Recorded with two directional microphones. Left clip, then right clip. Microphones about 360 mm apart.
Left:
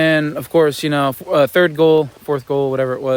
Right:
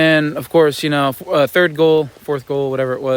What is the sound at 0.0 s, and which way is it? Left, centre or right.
Speech, centre.